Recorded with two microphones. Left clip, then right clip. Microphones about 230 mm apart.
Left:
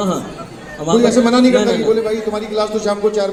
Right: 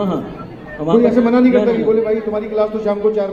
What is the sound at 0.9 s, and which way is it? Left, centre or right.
Speech, left.